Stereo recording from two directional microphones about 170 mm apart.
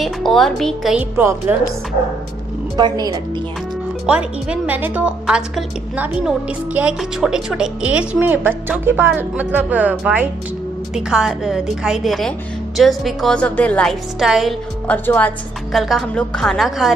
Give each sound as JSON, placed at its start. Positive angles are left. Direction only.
{"t": 0.0, "sound": "a woman's voice", "side_deg": 0}
{"t": 2.8, "sound": "a woman's voice", "side_deg": -20}
{"t": 4.0, "sound": "a woman's voice", "side_deg": -5}
{"t": 14.9, "sound": "a woman's voice", "side_deg": 10}